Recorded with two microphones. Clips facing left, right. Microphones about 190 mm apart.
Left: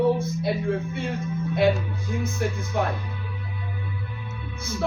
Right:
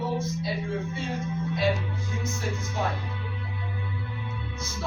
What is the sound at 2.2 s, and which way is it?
Speech, 60° left (ahead or behind).